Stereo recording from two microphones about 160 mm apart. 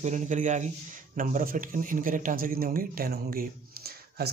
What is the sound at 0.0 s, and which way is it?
Speech, 50° right (ahead or behind).